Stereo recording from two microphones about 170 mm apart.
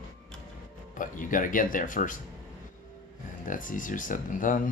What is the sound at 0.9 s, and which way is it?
Speech, 50° left (ahead or behind).